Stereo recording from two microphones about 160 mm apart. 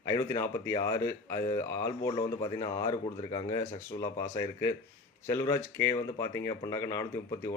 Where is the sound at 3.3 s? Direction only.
25° left (ahead or behind).